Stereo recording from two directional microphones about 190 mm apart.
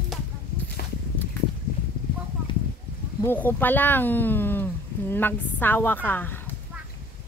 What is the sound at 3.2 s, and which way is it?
Speech, 10° left (ahead or behind).